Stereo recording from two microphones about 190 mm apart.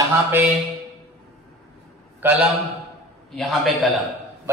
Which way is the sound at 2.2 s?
10° right (ahead or behind).